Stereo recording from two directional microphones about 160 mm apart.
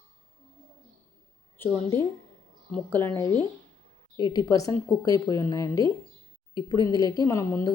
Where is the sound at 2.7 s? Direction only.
10° left (ahead or behind).